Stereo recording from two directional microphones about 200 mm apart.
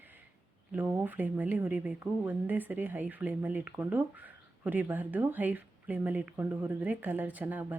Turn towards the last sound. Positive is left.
turn(degrees=-10)  # may be behind; listen again after turning